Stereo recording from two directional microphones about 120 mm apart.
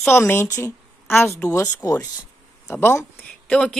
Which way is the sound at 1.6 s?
10° left (ahead or behind).